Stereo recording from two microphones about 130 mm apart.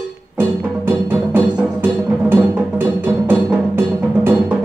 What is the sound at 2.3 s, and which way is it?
Music, 15° right (ahead or behind).